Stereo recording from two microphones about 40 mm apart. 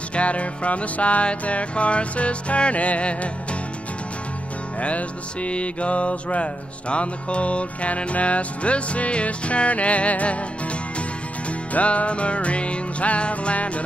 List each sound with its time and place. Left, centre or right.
0.1 s music: left
4.7 s music: left
11.7 s music: left